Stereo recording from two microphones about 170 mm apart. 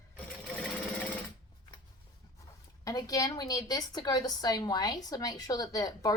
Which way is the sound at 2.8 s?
20° left (ahead or behind).